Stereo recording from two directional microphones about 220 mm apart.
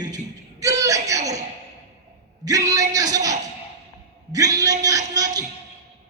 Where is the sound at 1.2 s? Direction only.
30° right (ahead or behind).